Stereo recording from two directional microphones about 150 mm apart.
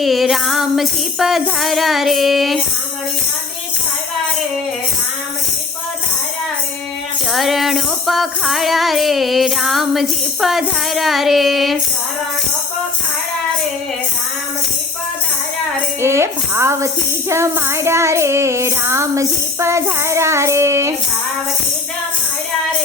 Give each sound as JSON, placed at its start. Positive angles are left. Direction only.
{"t": 0.0, "sound": "music", "side_deg": 0}
{"t": 7.3, "sound": "music", "side_deg": 0}
{"t": 16.0, "sound": "speech", "side_deg": -15}